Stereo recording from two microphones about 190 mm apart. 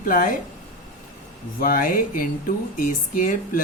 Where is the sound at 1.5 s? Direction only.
50° left (ahead or behind).